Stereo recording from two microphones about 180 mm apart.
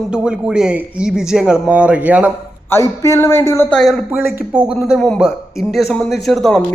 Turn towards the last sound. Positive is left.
turn(degrees=0)  # may be behind; listen again after turning